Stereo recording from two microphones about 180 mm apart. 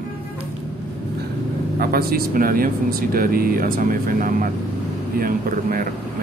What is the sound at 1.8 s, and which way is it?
Speech, 55° right (ahead or behind).